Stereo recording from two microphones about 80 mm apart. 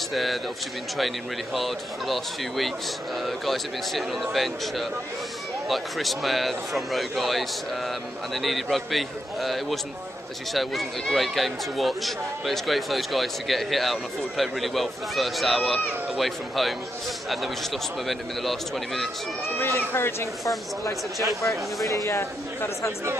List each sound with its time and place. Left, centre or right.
0.1 s speech: centre
18.0 s speech: centre
19.6 s speech: left